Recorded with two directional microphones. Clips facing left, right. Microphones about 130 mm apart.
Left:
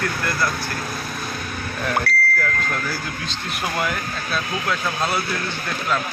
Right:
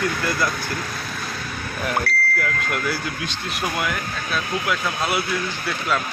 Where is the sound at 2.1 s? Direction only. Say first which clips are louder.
Left 2 dB; 90° left.